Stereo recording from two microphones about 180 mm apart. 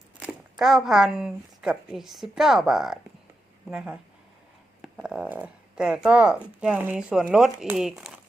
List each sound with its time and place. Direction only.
0.2 s speech: 5° right (ahead or behind)